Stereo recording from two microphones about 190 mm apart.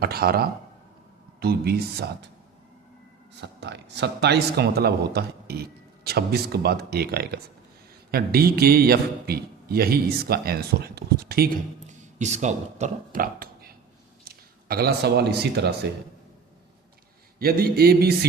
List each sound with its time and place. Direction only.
0.0 s a man's voice: 55° right (ahead or behind)
3.4 s a man's voice: 65° right (ahead or behind)
17.4 s a man's voice: 55° right (ahead or behind)